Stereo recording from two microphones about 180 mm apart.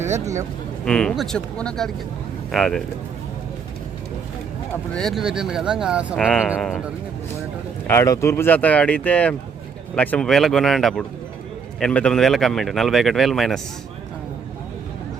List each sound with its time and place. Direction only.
0.0 s speech: 15° right (ahead or behind)
0.9 s speech: 5° left (ahead or behind)
4.9 s speech: centre (ahead or behind)
7.9 s speech: 15° left (ahead or behind); by 13.6 s centre (ahead or behind)